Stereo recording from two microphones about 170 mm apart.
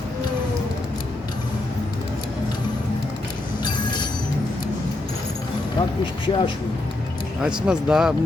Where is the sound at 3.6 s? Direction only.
25° left (ahead or behind).